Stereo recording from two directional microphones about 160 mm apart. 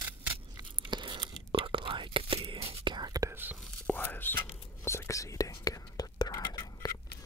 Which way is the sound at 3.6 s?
10° left (ahead or behind).